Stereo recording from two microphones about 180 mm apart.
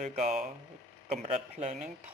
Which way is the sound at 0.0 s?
45° right (ahead or behind).